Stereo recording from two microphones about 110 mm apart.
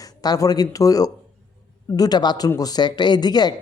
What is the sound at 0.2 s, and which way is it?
Speech, 35° left (ahead or behind).